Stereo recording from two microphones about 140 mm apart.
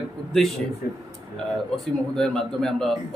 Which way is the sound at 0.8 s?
90° left.